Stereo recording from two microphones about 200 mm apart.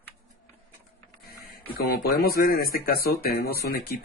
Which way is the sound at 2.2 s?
45° left (ahead or behind).